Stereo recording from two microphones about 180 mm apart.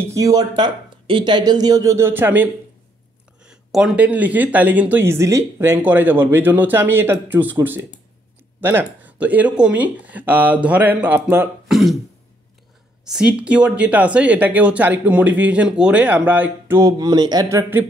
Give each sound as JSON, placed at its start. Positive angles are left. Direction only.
{"t": 0.0, "sound": "speech", "side_deg": -15}
{"t": 11.7, "sound": "throat clearing", "side_deg": 0}
{"t": 13.1, "sound": "speech", "side_deg": -5}